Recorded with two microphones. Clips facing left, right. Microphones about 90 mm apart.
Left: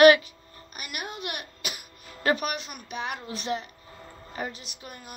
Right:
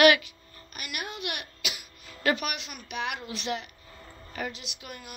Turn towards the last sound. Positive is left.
turn(degrees=40)  # may be behind; listen again after turning